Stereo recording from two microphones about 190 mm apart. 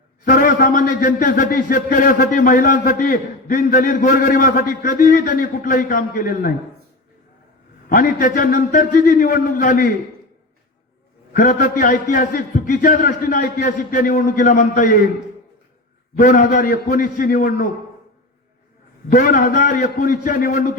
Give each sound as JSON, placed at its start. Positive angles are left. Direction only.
{"t": 0.3, "sound": "a man's voice", "side_deg": 50}
{"t": 7.9, "sound": "a man's voice", "side_deg": 45}
{"t": 11.3, "sound": "a man's voice", "side_deg": 45}
{"t": 16.1, "sound": "a man's voice", "side_deg": 45}
{"t": 19.1, "sound": "a man's voice", "side_deg": 45}